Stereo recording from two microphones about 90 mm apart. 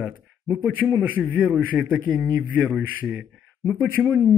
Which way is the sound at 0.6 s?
20° right (ahead or behind).